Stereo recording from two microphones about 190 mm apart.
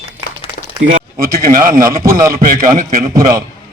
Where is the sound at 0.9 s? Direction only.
50° right (ahead or behind).